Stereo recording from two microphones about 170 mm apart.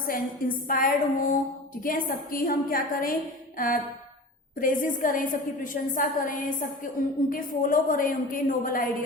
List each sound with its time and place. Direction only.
0.1 s a woman's voice: 55° left (ahead or behind)
4.6 s a woman's voice: 55° left (ahead or behind)